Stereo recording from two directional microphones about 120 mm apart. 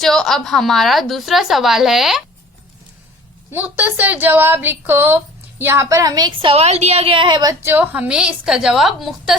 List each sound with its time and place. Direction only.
0.0 s a woman's voice: 5° left (ahead or behind)
3.5 s a woman's voice: 15° right (ahead or behind); by 6.5 s 35° right (ahead or behind)
6.5 s a woman's voice: 60° right (ahead or behind); by 7.5 s 40° right (ahead or behind)
7.6 s a woman's voice: 15° right (ahead or behind)